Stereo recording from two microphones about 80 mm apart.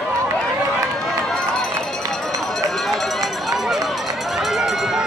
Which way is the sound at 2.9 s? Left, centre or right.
Centre.